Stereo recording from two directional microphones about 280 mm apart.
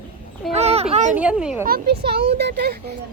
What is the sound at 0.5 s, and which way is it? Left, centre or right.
Speech, right.